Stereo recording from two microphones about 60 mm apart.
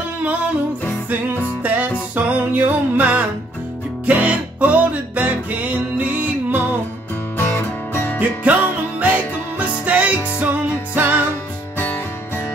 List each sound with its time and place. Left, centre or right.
1.6 s music: right
7.3 s music: left
9.0 s music: right